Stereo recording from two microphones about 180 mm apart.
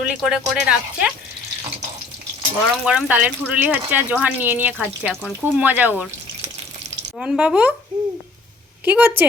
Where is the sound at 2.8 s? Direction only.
5° right (ahead or behind).